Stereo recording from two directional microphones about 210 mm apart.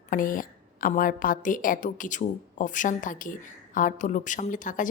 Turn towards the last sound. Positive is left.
turn(degrees=40)  # may be behind; listen again after turning